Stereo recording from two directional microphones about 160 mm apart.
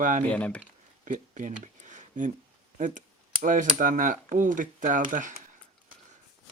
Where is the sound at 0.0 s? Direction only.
55° right (ahead or behind).